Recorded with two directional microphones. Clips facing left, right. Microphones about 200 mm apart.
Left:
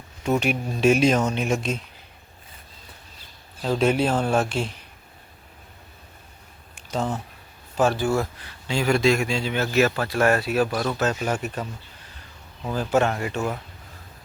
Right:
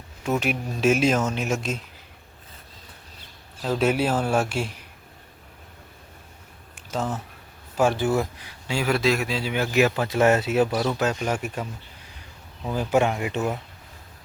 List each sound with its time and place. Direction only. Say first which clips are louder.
0.2 s speech: left 2 dB; centre (ahead or behind)
3.6 s speech: left 1 dB; 5° right (ahead or behind)
6.7 s a sound: left 1 dB; 5° right (ahead or behind)
7.8 s speech: even; 15° right (ahead or behind)
12.7 s speech: even; 15° right (ahead or behind)